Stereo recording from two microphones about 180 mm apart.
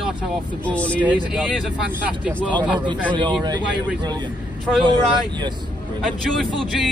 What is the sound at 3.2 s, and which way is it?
Speech, 25° right (ahead or behind).